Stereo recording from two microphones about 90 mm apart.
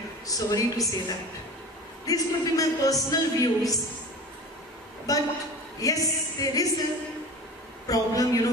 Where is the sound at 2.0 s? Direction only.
40° left (ahead or behind).